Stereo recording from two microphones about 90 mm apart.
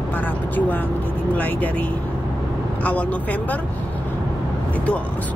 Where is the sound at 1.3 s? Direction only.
15° left (ahead or behind).